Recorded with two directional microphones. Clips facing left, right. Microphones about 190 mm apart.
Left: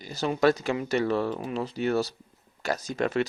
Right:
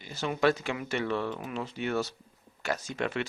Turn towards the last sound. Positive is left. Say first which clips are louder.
# left 6 dB
turn(degrees=40)  # may be behind; listen again after turning